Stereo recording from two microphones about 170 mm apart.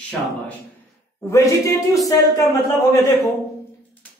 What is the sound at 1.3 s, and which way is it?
Speech, 20° left (ahead or behind).